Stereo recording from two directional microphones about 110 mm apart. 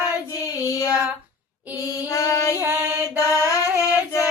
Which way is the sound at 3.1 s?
30° left (ahead or behind).